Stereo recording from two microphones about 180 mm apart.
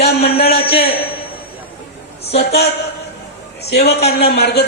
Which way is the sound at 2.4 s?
65° left (ahead or behind).